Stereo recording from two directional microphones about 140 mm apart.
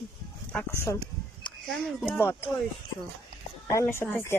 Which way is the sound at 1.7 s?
Centre (ahead or behind).